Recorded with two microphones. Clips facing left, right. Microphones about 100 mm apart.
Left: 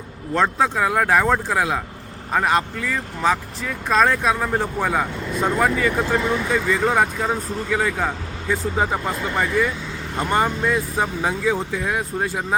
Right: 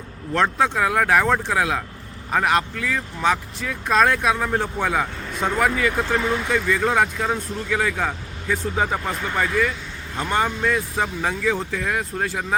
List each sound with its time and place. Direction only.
0.3 s speech: centre (ahead or behind)